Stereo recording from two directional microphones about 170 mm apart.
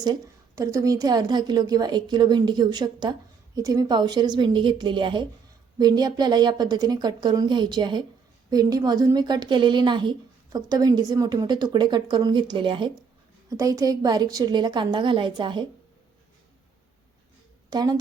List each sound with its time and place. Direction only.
0.0 s a woman's voice: 20° right (ahead or behind)
17.7 s a woman's voice: 25° right (ahead or behind)